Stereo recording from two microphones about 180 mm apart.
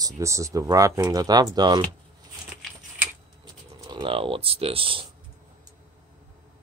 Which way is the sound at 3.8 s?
25° right (ahead or behind).